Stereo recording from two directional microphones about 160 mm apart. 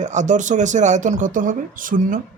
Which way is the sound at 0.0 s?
50° right (ahead or behind).